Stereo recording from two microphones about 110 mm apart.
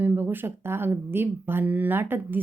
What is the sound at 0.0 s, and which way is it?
A woman's voice, 20° right (ahead or behind).